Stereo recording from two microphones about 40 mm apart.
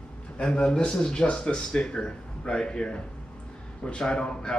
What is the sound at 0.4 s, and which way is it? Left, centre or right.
Speech, left.